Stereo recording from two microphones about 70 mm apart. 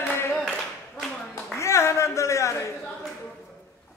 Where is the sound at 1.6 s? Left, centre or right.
Left.